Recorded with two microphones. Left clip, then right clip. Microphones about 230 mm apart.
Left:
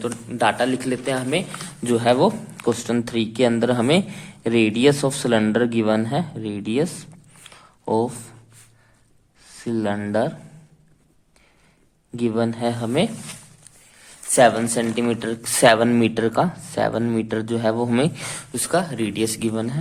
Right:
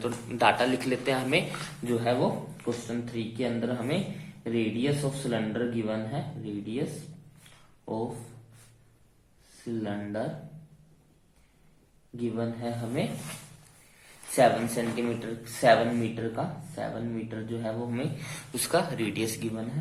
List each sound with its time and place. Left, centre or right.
0.0 s speech: left
9.8 s speech: left
12.1 s speech: left
14.3 s speech: left